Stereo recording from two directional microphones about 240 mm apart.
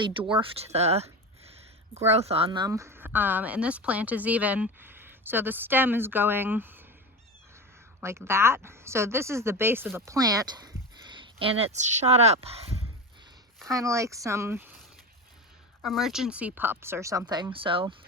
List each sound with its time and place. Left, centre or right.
0.3 s speech: right
2.1 s speech: right; by 6.8 s centre
8.0 s speech: centre; by 12.7 s right
13.7 s speech: centre
15.8 s speech: centre; by 17.9 s right